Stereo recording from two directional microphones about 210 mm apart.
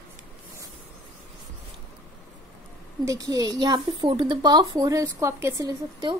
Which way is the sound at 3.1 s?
15° right (ahead or behind).